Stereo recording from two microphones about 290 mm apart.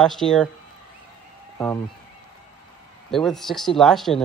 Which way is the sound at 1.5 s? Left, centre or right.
Centre.